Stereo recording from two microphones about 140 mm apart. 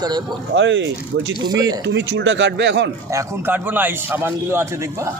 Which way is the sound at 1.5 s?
25° right (ahead or behind).